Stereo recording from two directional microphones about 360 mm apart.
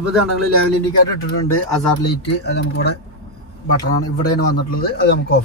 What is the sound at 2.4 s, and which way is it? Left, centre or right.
Speech, left.